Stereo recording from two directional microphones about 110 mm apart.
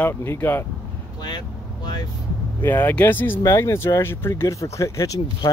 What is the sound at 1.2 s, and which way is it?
Speech, 40° left (ahead or behind).